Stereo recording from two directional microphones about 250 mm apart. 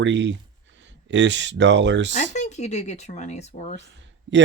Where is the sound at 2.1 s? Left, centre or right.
Left.